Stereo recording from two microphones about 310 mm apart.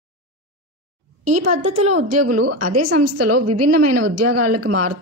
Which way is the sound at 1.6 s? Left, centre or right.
Right.